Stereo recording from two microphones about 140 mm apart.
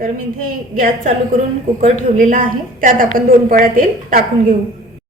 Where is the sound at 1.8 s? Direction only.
65° right (ahead or behind); by 4.2 s 90° right.